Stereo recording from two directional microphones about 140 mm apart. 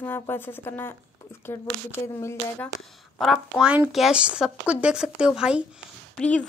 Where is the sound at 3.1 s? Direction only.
Centre (ahead or behind).